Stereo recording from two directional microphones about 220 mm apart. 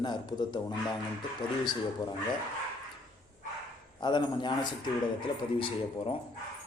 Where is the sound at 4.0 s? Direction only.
20° left (ahead or behind).